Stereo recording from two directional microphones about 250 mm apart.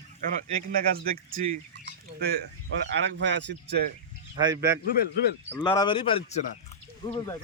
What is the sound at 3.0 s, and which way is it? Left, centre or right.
Speech, right.